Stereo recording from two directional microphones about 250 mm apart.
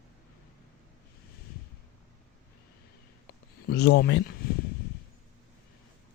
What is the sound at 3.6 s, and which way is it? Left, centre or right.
Speech, left.